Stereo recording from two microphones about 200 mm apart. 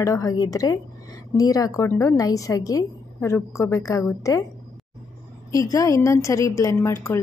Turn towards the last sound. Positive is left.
turn(degrees=15)  # may be behind; listen again after turning